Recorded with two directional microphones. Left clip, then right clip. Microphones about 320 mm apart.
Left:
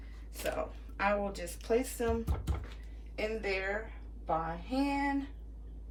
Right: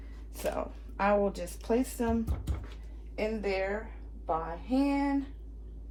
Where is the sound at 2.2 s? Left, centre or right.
Centre.